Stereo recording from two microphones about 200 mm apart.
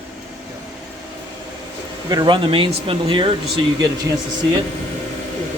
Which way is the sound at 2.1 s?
20° right (ahead or behind).